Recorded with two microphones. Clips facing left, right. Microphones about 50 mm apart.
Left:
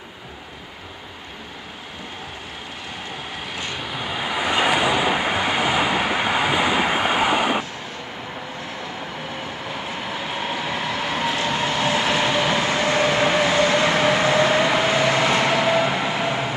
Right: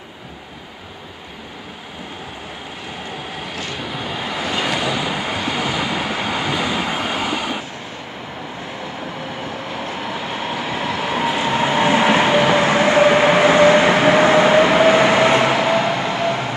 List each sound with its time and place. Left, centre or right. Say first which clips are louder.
3.5 s vehicle: right 1 dB; centre; by 7.6 s left
9.7 s vehicle: right 2 dB; centre; by 12.6 s right
12.6 s train: right 6 dB; right
15.0 s vehicle: right 5 dB; right
15.3 s train: right 3 dB; centre